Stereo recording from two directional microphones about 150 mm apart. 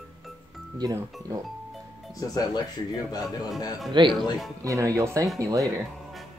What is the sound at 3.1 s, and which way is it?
Speech, 25° left (ahead or behind).